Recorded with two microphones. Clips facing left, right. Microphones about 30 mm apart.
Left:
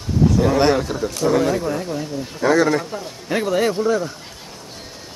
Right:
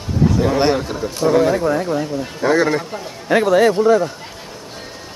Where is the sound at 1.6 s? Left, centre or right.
Right.